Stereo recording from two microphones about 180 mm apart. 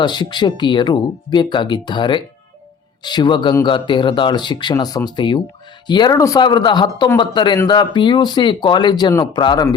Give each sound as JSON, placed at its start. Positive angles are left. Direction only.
{"t": 0.0, "sound": "speech", "side_deg": 25}